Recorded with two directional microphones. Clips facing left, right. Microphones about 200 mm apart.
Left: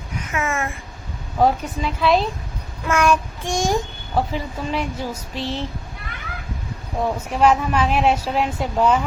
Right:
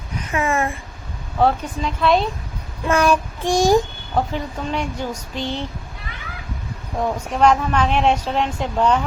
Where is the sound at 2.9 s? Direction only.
35° right (ahead or behind).